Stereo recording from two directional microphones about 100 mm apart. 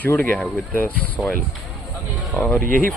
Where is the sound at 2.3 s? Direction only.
20° left (ahead or behind).